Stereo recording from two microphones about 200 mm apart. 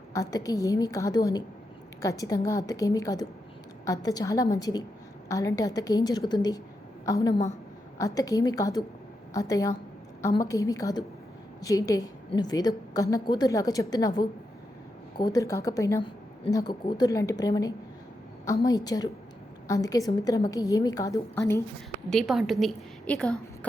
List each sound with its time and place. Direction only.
0.1 s a woman's voice: 15° left (ahead or behind)
22.1 s a woman's voice: centre (ahead or behind)